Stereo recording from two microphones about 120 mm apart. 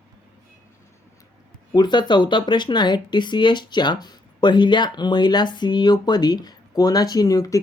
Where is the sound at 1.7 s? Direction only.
40° left (ahead or behind).